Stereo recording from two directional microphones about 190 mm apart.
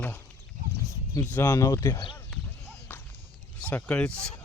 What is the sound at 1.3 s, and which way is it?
Speech, 10° left (ahead or behind).